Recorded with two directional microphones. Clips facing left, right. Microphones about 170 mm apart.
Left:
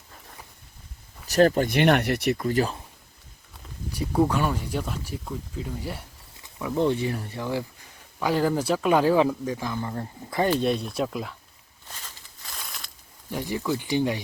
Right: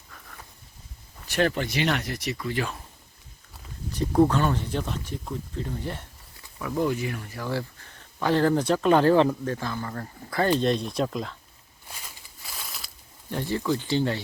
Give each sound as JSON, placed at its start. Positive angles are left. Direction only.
{"t": 1.3, "sound": "speech", "side_deg": 40}
{"t": 2.4, "sound": "speech", "side_deg": 40}
{"t": 3.9, "sound": "speech", "side_deg": 5}
{"t": 6.4, "sound": "speech", "side_deg": 20}
{"t": 7.4, "sound": "speech", "side_deg": 15}
{"t": 10.6, "sound": "speech", "side_deg": 5}
{"t": 11.9, "sound": "a sound", "side_deg": -10}
{"t": 13.3, "sound": "speech", "side_deg": 10}